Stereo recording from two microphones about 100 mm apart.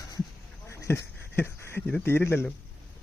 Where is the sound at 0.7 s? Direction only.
25° left (ahead or behind).